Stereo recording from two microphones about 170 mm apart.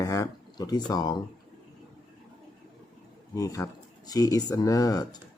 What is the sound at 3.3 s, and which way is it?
Speech, 20° left (ahead or behind).